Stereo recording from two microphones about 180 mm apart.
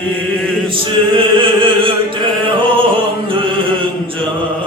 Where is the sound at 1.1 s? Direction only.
30° right (ahead or behind).